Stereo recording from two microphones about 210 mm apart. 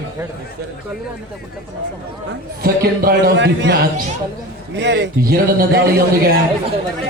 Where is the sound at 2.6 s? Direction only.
45° right (ahead or behind).